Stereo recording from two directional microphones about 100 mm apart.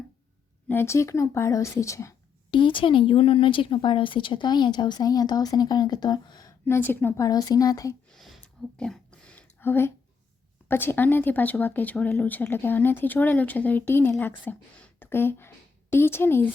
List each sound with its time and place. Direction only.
0.7 s speech: 25° left (ahead or behind)
2.5 s a woman's voice: 55° left (ahead or behind)
6.7 s a woman's voice: 20° left (ahead or behind)
7.2 s speech: 35° left (ahead or behind)
8.1 s a sound: centre (ahead or behind)
9.6 s speech: 25° left (ahead or behind)